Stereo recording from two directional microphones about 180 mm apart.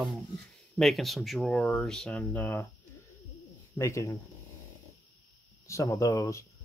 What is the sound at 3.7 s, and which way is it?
Speech, 15° left (ahead or behind).